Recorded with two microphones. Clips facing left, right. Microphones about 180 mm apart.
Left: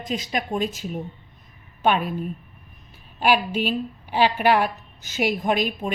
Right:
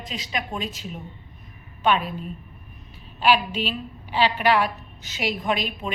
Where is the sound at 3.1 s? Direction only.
50° left (ahead or behind).